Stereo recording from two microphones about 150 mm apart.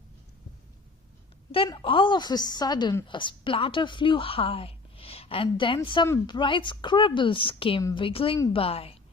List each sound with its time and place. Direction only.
1.5 s a woman's voice: 35° left (ahead or behind)